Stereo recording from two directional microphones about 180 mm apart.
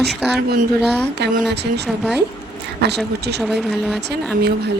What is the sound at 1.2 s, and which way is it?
Speech, 60° right (ahead or behind).